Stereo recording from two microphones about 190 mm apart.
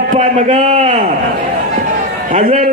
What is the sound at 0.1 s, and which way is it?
Speech, 35° right (ahead or behind).